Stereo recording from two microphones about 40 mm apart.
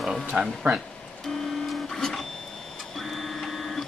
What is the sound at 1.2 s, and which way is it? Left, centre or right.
Printer, centre.